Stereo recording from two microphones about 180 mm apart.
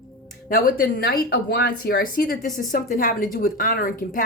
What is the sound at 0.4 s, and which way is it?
A woman's voice, 55° left (ahead or behind).